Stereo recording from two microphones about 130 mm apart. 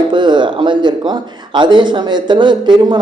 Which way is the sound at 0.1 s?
35° right (ahead or behind).